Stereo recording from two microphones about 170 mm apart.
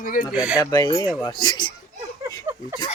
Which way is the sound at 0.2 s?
5° right (ahead or behind).